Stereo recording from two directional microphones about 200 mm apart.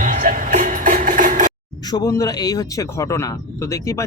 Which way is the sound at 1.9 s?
20° left (ahead or behind).